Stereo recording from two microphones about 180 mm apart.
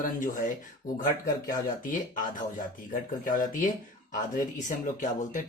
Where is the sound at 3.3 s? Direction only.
50° left (ahead or behind).